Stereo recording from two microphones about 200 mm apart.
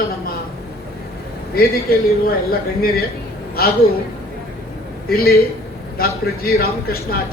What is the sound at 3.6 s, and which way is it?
Speech, 50° left (ahead or behind).